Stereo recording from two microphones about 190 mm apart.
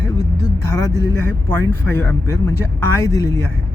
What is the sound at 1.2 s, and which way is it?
Speech, 10° left (ahead or behind).